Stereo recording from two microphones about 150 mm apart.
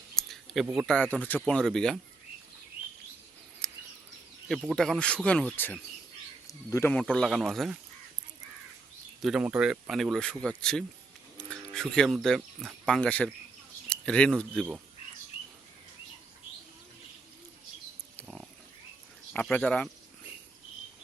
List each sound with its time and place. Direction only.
0.2 s a sound: centre (ahead or behind)
1.1 s speech: 10° left (ahead or behind)
3.6 s a sound: 5° left (ahead or behind)
4.4 s speech: centre (ahead or behind)
6.5 s speech: 20° left (ahead or behind)
6.9 s speech: 10° left (ahead or behind)
9.2 s speech: 5° right (ahead or behind)
18.2 s pig: centre (ahead or behind)
19.3 s speech: 10° left (ahead or behind)